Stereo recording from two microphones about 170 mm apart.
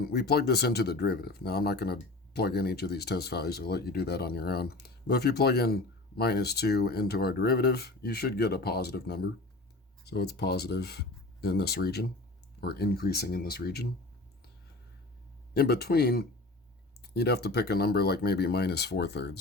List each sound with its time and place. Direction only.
0.0 s speech: 75° left (ahead or behind)
15.5 s speech: 70° left (ahead or behind)